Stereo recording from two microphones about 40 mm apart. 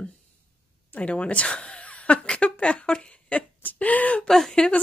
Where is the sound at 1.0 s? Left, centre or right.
Left.